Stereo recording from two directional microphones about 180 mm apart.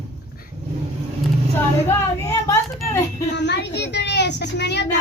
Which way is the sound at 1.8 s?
15° left (ahead or behind).